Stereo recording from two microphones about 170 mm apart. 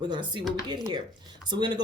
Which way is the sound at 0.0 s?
25° right (ahead or behind).